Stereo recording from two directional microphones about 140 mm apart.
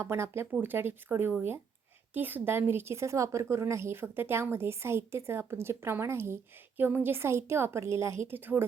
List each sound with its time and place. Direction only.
0.0 s a woman's voice: 20° right (ahead or behind)